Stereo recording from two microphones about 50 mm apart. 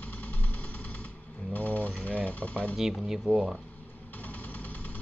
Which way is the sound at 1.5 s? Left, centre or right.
Left.